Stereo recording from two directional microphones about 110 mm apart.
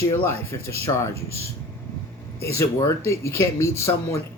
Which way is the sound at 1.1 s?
70° right (ahead or behind).